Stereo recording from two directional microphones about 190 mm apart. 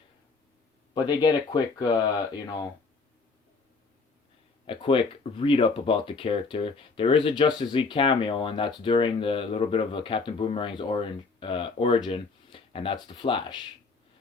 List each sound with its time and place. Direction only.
0.9 s speech: 25° left (ahead or behind)
4.6 s speech: 30° left (ahead or behind)